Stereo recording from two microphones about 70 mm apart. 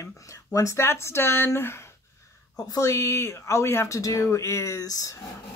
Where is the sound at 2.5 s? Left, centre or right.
Left.